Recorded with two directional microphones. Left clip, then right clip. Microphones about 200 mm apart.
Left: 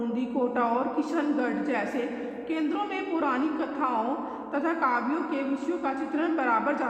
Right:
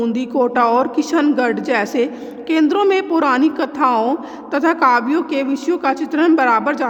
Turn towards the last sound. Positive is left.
turn(degrees=-50)  # may be behind; listen again after turning